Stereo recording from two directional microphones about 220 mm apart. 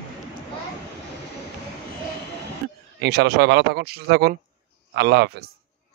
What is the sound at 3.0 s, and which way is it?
Speech, 50° right (ahead or behind).